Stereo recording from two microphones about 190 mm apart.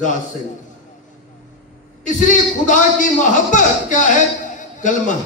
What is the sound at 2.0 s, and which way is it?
A man's voice, 40° left (ahead or behind).